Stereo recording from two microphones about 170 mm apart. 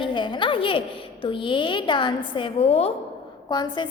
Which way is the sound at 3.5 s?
25° left (ahead or behind).